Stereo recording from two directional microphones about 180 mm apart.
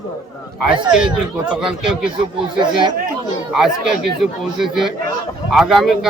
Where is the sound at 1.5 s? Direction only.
Centre (ahead or behind).